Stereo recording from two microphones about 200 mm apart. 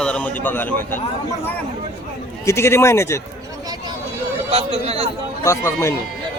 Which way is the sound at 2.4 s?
15° left (ahead or behind).